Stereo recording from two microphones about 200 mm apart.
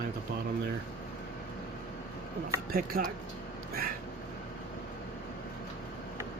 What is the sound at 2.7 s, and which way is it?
Speech, 45° right (ahead or behind).